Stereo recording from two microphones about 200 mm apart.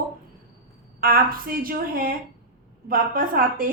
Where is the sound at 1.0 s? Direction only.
45° right (ahead or behind).